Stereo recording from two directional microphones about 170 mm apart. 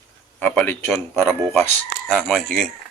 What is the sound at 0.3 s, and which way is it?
Speech, 10° left (ahead or behind).